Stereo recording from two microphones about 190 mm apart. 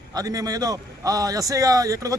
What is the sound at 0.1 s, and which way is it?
A man's voice, 20° right (ahead or behind).